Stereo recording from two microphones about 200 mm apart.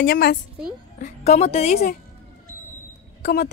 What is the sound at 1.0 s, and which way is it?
Speech, 35° left (ahead or behind).